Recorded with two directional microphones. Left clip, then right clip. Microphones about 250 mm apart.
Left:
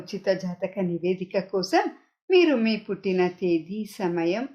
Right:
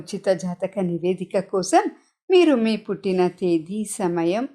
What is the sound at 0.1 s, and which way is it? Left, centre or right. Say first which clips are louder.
A woman's voice: right 4 dB; right.